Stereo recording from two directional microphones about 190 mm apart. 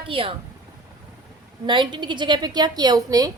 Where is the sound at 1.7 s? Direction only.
25° right (ahead or behind).